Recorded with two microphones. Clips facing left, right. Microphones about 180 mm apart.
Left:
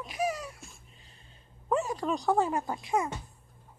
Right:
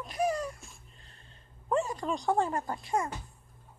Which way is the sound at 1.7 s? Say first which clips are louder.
Left 1 dB; 5° left (ahead or behind).